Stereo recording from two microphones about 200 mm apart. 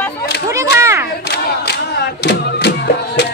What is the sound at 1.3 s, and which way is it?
Crowd, 55° left (ahead or behind).